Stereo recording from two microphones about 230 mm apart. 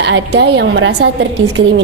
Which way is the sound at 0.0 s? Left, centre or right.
Right.